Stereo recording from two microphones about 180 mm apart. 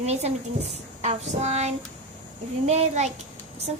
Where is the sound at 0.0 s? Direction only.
35° right (ahead or behind).